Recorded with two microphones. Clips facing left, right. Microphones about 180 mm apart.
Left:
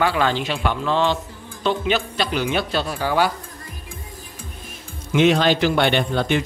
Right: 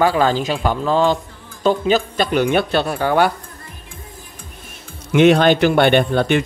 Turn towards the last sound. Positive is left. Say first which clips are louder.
# right 5 dB
turn(degrees=-55)  # may be behind; listen again after turning